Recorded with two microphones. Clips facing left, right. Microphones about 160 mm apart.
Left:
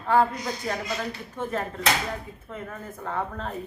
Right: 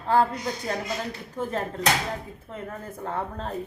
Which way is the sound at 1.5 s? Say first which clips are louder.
Right 1 dB; 35° right (ahead or behind).